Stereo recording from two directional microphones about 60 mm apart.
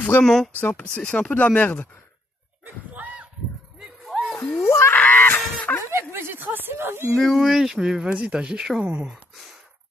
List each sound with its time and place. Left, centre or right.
0.2 s speech: centre
0.6 s speech: left
0.8 s speech: centre
2.6 s a sound: right
3.8 s a sound: centre
4.6 s speech: left
4.9 s goose: left
6.1 s speech: right
7.2 s speech: centre